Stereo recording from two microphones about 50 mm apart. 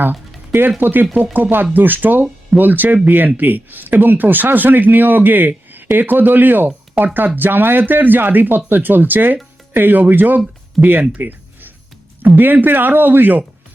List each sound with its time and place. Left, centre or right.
0.8 s speech: right
11.1 s music: right
12.2 s speech: right